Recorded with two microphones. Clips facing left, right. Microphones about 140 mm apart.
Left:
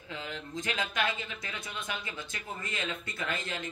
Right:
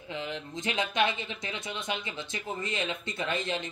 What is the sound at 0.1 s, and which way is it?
Speech, 20° right (ahead or behind).